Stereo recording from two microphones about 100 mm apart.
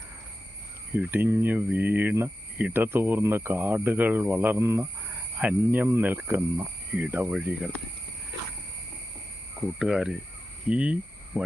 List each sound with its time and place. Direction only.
0.9 s speech: 20° right (ahead or behind)
5.0 s cricket: 15° right (ahead or behind)
5.9 s speech: 20° right (ahead or behind)
9.6 s speech: 10° right (ahead or behind)